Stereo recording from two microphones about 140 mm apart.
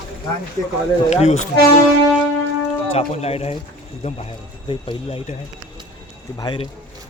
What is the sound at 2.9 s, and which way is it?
Speech, 45° left (ahead or behind).